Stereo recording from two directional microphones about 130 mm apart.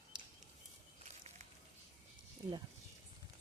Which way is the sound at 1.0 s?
65° right (ahead or behind).